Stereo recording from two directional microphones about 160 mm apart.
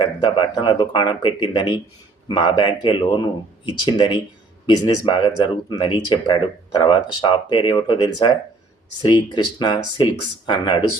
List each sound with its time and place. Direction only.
0.0 s speech: 30° left (ahead or behind)